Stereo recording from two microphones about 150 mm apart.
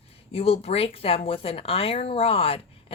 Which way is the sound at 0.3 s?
40° left (ahead or behind).